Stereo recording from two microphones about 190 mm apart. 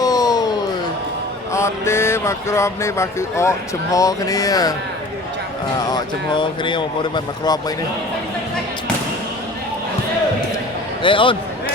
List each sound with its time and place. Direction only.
0.0 s a sound: 20° left (ahead or behind)
1.5 s speech: 15° left (ahead or behind)
5.9 s speech: 25° left (ahead or behind)
11.0 s speech: 25° left (ahead or behind)